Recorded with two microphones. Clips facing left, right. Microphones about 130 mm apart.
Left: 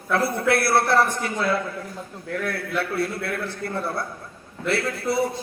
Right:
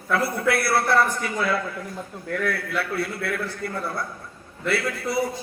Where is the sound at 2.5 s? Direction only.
25° left (ahead or behind).